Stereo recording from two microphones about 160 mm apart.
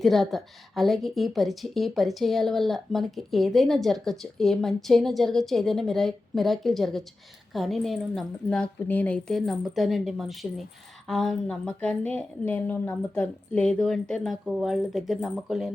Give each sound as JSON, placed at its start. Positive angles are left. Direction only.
{"t": 0.0, "sound": "a woman's voice", "side_deg": 0}